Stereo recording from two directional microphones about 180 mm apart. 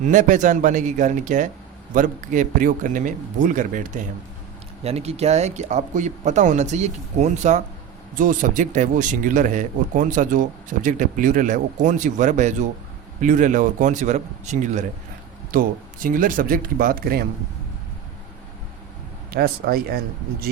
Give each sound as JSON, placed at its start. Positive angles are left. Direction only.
{"t": 0.1, "sound": "speech", "side_deg": -45}
{"t": 4.8, "sound": "speech", "side_deg": -35}
{"t": 19.3, "sound": "speech", "side_deg": -55}